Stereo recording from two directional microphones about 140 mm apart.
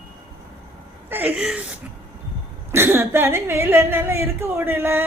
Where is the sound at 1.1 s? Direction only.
10° right (ahead or behind).